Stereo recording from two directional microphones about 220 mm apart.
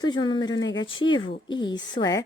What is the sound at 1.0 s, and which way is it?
A woman's voice, 20° left (ahead or behind).